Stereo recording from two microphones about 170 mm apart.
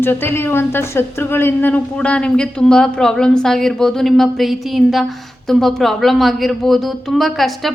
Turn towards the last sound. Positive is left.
turn(degrees=0)  # may be behind; listen again after turning